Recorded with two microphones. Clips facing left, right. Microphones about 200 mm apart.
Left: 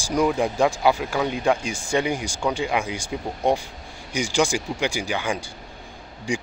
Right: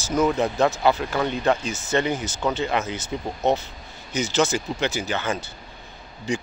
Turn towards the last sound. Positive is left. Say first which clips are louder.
# even
turn(degrees=10)  # may be behind; listen again after turning